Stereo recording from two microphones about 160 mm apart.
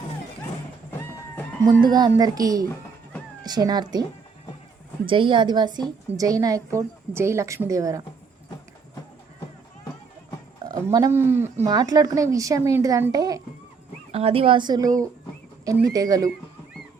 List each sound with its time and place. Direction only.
1.6 s a woman's voice: 25° right (ahead or behind)
5.0 s a woman's voice: 30° right (ahead or behind)
10.7 s a woman's voice: 20° right (ahead or behind)
14.1 s a woman's voice: 40° right (ahead or behind); by 16.3 s 20° right (ahead or behind)